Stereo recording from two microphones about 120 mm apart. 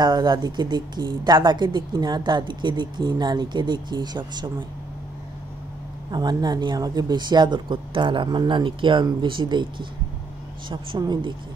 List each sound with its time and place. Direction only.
0.0 s speech: 40° right (ahead or behind)
6.1 s speech: 35° right (ahead or behind)